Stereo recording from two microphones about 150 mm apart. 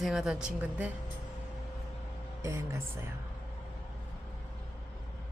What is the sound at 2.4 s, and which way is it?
Speech, 20° right (ahead or behind).